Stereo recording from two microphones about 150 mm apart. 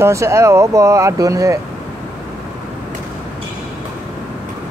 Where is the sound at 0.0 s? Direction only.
20° right (ahead or behind).